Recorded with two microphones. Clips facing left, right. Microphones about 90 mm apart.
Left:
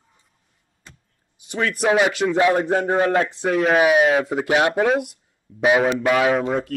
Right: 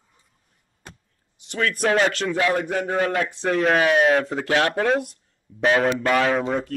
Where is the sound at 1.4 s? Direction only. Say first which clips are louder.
Left 2 dB; 15° left (ahead or behind).